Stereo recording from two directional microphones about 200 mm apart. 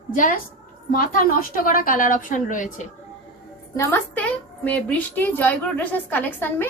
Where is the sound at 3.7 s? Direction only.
10° left (ahead or behind).